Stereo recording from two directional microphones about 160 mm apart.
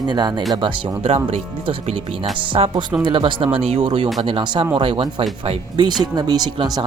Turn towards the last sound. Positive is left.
turn(degrees=-25)  # may be behind; listen again after turning